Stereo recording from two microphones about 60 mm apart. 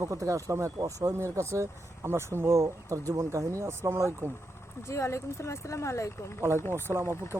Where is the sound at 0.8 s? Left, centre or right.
Right.